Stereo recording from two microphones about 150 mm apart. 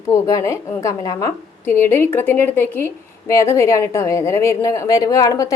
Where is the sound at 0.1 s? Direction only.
20° left (ahead or behind).